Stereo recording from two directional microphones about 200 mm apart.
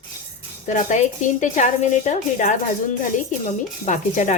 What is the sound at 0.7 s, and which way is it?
A woman's voice, 35° left (ahead or behind).